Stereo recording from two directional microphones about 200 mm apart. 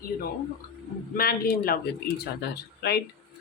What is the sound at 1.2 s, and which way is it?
Speech, 50° left (ahead or behind).